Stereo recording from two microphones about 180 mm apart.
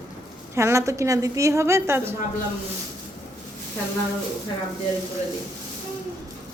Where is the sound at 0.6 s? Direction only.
15° right (ahead or behind).